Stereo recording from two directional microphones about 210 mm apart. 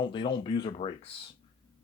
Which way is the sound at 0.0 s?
20° left (ahead or behind).